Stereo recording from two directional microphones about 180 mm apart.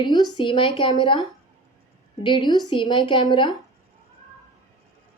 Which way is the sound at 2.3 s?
25° left (ahead or behind).